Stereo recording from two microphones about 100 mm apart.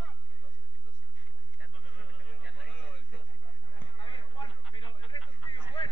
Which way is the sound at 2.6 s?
15° left (ahead or behind).